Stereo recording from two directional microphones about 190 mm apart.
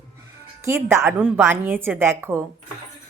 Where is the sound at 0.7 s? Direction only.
15° right (ahead or behind).